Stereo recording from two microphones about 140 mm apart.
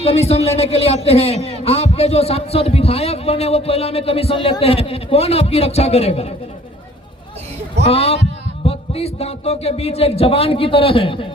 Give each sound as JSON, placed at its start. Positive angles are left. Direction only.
{"t": 0.0, "sound": "speech", "side_deg": 45}
{"t": 7.9, "sound": "speech", "side_deg": 45}